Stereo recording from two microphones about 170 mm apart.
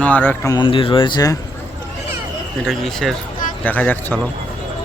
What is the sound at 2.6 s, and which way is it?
Speech, centre (ahead or behind).